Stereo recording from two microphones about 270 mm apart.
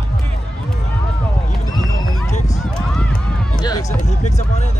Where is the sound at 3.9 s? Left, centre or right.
Left.